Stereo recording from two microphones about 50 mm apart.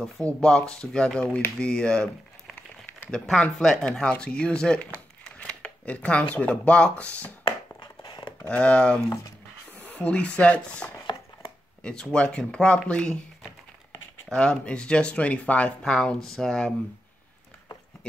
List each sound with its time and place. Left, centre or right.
0.2 s speech: left
3.3 s speech: centre
8.5 s speech: left
14.3 s speech: left
15.8 s speech: centre